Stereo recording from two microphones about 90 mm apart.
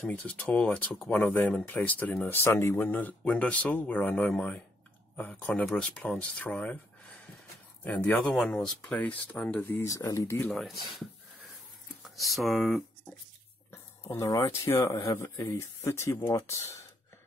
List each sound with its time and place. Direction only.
0.1 s speech: 15° left (ahead or behind)
7.8 s speech: 15° left (ahead or behind)
8.4 s speech: 5° left (ahead or behind)
9.6 s speech: 30° left (ahead or behind)
10.5 s speech: centre (ahead or behind)
12.0 s speech: centre (ahead or behind)
13.7 s speech: 35° left (ahead or behind)